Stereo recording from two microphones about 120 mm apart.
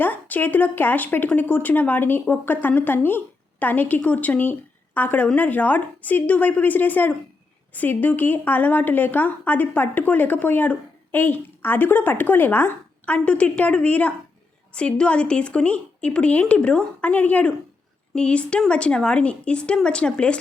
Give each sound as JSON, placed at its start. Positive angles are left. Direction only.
{"t": 0.0, "sound": "speech", "side_deg": 15}